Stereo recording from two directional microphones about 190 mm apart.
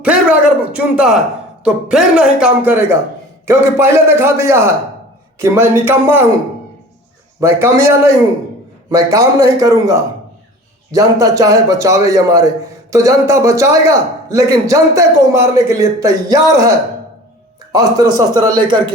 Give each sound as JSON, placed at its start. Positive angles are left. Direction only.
{"t": 0.0, "sound": "a man's voice", "side_deg": -5}
{"t": 7.3, "sound": "a man's voice", "side_deg": -15}